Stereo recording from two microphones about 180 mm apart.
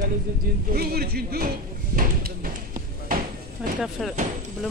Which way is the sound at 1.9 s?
50° right (ahead or behind).